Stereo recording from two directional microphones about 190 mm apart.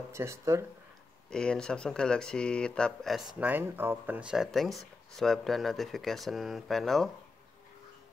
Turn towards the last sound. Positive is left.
turn(degrees=0)  # may be behind; listen again after turning